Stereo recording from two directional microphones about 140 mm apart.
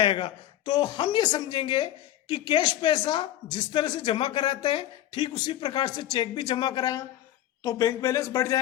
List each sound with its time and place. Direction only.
0.0 s speech: 35° left (ahead or behind)